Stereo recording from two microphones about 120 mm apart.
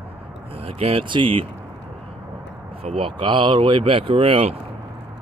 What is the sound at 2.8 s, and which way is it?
Speech, 50° right (ahead or behind).